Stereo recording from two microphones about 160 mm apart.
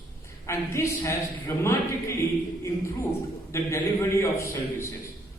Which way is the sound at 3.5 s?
15° left (ahead or behind).